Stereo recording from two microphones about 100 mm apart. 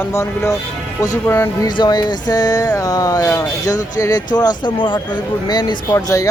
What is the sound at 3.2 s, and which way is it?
Speech, 25° left (ahead or behind).